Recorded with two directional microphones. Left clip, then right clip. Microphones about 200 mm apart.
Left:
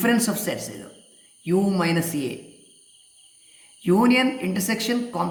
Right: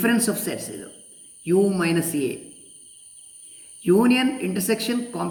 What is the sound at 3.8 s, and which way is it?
A man's voice, 30° left (ahead or behind).